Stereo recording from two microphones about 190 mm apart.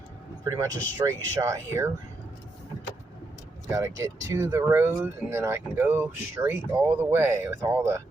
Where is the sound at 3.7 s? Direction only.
15° right (ahead or behind).